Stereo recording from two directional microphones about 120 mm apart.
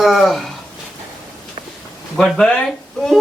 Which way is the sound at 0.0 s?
Centre (ahead or behind).